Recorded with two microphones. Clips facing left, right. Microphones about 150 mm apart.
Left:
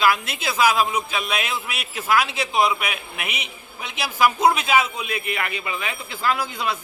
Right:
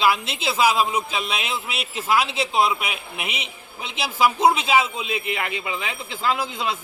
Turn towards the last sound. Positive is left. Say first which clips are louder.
# even
turn(degrees=-20)  # may be behind; listen again after turning